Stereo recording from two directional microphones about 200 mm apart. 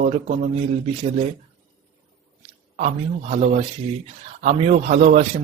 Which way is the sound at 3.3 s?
35° right (ahead or behind).